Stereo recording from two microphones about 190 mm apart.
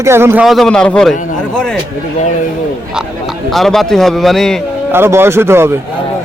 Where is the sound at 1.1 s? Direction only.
40° left (ahead or behind).